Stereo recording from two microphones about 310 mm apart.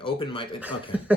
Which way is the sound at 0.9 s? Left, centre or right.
Centre.